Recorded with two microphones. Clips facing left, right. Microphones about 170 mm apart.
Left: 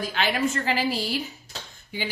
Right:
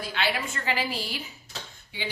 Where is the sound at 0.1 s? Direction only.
45° left (ahead or behind).